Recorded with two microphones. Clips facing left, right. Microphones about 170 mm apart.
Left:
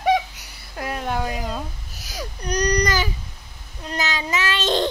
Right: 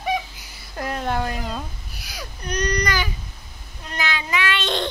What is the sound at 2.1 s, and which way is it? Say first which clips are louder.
Baby cry: left 3 dB; 35° left (ahead or behind).